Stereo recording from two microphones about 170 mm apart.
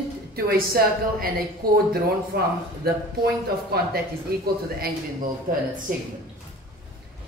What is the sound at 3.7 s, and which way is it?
Speech, 70° right (ahead or behind).